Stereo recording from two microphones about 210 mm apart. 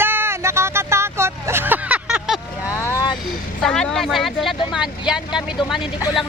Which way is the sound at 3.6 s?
5° left (ahead or behind).